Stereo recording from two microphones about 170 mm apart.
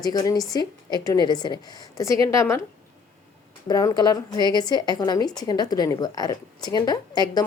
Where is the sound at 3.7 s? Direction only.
20° left (ahead or behind).